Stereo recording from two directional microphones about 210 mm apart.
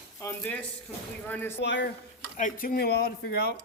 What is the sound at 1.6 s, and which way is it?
Speech, 55° left (ahead or behind).